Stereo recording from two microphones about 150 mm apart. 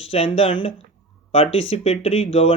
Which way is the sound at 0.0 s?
40° left (ahead or behind).